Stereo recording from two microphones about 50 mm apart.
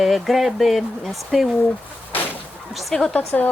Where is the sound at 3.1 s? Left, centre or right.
Left.